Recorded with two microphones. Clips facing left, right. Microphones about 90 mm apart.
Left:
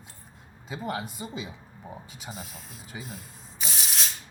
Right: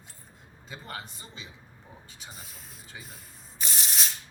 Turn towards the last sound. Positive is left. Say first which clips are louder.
# even
turn(degrees=0)  # may be behind; listen again after turning